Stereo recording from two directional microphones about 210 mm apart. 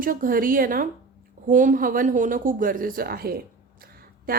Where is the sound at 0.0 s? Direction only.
40° right (ahead or behind).